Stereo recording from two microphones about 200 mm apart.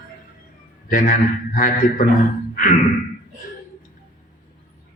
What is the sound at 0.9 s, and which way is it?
A man's voice, 45° left (ahead or behind).